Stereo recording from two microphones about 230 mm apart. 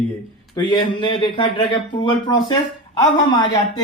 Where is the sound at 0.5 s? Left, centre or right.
Centre.